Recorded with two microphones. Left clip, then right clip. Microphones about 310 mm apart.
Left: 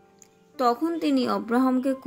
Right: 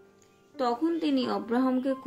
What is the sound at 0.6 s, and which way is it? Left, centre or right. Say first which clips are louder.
Speech: left 4 dB; left.